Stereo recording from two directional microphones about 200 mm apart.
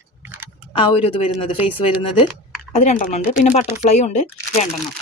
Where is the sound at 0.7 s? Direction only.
25° left (ahead or behind).